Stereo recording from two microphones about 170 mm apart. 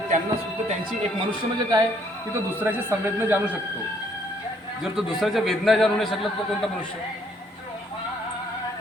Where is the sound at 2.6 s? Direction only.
10° right (ahead or behind).